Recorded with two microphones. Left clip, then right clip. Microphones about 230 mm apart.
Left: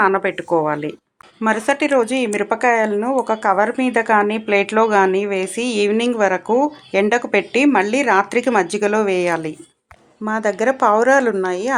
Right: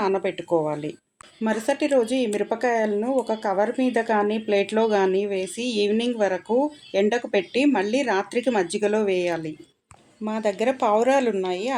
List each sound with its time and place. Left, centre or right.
0.2 s speech: centre
0.5 s a woman's voice: left
1.4 s speech: centre
10.2 s a woman's voice: left
10.9 s speech: centre
11.3 s a woman's voice: left